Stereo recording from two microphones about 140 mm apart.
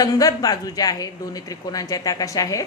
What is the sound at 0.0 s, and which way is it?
A woman's voice, 25° left (ahead or behind).